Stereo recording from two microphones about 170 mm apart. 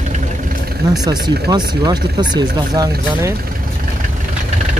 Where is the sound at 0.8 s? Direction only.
20° right (ahead or behind).